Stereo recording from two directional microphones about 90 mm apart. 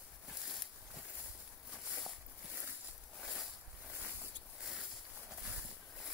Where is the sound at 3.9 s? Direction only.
20° right (ahead or behind).